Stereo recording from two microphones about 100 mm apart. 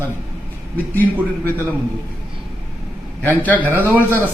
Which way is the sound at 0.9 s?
20° left (ahead or behind).